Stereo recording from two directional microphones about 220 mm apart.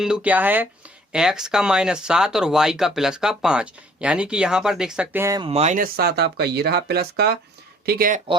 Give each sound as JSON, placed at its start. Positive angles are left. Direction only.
{"t": 0.0, "sound": "speech", "side_deg": -5}
{"t": 5.5, "sound": "speech", "side_deg": -30}